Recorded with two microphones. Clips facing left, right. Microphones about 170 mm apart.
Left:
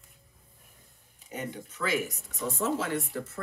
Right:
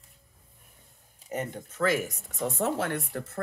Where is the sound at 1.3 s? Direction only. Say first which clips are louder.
Right 3 dB; 45° right (ahead or behind).